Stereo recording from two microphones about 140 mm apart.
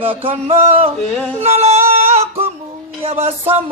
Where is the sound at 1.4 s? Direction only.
50° right (ahead or behind).